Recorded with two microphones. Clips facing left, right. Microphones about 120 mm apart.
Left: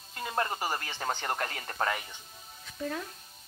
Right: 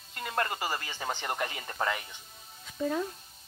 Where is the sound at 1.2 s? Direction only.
10° right (ahead or behind).